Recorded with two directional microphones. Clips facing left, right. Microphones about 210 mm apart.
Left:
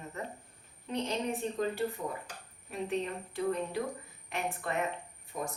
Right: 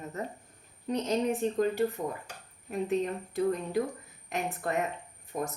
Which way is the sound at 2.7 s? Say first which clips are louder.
Right 5 dB; 40° right (ahead or behind).